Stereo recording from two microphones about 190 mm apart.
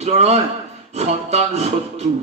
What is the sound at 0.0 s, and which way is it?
A man's voice, 35° right (ahead or behind).